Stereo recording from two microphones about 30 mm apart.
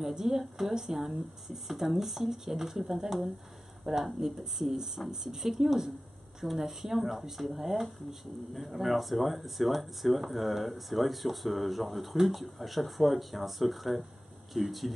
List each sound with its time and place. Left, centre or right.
0.0 s speech: centre